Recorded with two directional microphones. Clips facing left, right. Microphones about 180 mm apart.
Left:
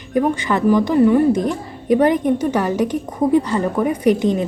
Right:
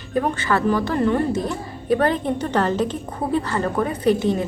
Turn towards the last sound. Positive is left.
turn(degrees=15)  # may be behind; listen again after turning